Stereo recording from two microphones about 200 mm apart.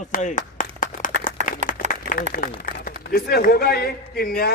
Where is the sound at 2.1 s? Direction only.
45° left (ahead or behind).